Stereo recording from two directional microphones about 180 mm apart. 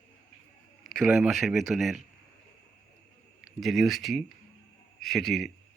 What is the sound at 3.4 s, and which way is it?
Speech, centre (ahead or behind).